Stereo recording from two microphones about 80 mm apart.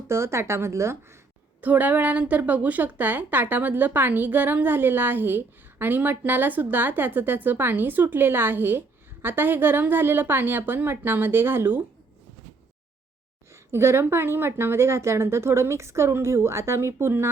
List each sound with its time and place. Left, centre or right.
0.1 s speech: right
1.6 s a woman's voice: right
13.5 s speech: right